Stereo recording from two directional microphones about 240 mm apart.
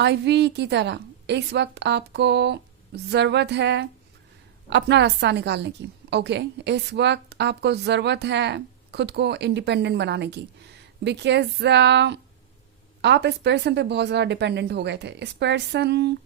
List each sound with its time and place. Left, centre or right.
0.0 s a woman's voice: right